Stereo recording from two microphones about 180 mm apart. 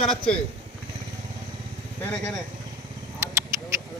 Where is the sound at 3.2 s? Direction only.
15° right (ahead or behind).